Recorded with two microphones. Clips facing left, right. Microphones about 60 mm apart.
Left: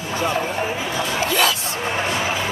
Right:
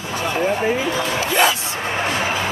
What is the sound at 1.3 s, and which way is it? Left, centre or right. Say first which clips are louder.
Music: right 3 dB; right.